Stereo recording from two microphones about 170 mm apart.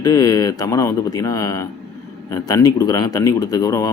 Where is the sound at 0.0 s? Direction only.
20° left (ahead or behind).